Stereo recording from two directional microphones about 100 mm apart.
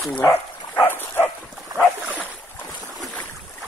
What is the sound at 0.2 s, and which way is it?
Dog, 25° left (ahead or behind).